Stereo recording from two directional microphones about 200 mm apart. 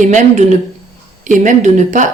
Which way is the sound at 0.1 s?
35° right (ahead or behind).